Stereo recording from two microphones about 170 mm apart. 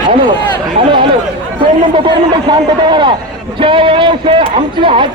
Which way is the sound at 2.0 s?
25° right (ahead or behind).